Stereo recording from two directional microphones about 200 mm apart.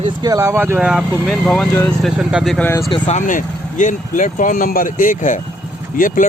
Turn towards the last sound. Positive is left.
turn(degrees=40)  # may be behind; listen again after turning